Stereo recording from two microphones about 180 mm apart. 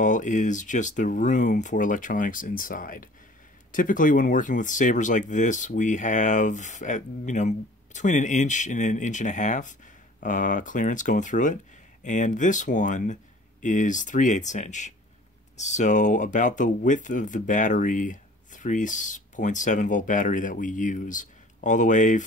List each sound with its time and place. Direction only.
0.0 s speech: 45° left (ahead or behind)